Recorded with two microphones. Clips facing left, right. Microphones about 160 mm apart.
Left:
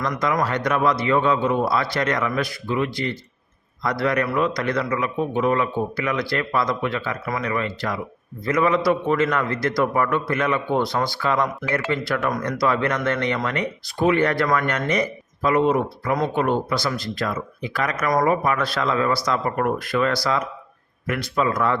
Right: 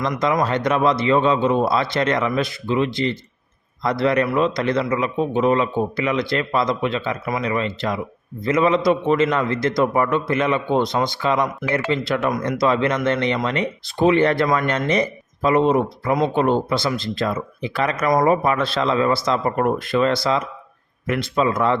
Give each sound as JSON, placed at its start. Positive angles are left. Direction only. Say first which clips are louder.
{"t": 0.2, "sound": "speech", "louder": "right 3 dB", "side_deg": -25}